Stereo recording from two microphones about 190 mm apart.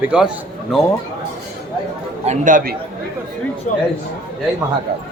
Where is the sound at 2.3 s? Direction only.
45° right (ahead or behind).